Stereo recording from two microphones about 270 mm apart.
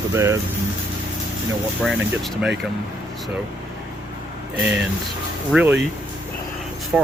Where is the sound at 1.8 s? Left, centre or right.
Centre.